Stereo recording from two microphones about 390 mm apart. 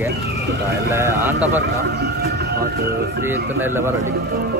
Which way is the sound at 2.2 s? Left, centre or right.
Right.